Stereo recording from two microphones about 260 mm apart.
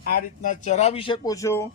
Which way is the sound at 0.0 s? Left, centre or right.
Left.